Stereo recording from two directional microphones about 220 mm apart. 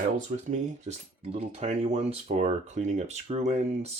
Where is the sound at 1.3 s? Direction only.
30° right (ahead or behind).